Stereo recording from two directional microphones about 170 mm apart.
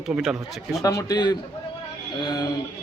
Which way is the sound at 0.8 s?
20° left (ahead or behind).